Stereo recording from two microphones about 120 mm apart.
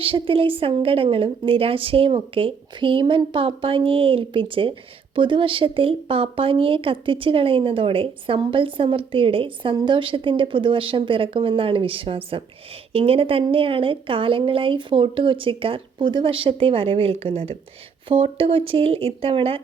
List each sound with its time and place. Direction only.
0.0 s a woman's voice: 50° right (ahead or behind)